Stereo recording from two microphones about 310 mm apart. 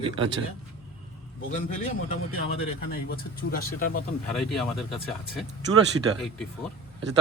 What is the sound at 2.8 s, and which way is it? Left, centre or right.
Speech, left.